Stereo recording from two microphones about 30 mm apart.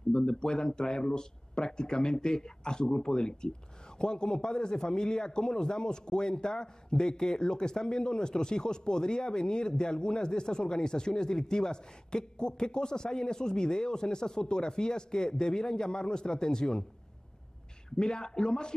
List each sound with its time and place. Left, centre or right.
0.1 s a man's voice: left
17.8 s a man's voice: left